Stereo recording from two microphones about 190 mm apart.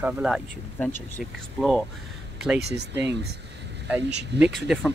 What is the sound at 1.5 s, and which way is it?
Speech, centre (ahead or behind).